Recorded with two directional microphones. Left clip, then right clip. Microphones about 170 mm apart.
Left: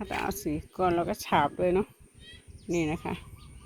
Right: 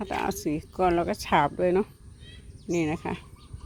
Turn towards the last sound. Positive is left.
turn(degrees=0)  # may be behind; listen again after turning